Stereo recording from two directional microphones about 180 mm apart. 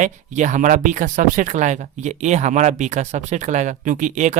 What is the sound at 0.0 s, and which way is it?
Speech, 45° right (ahead or behind).